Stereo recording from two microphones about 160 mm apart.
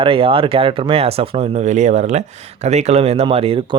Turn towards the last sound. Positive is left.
turn(degrees=-35)  # may be behind; listen again after turning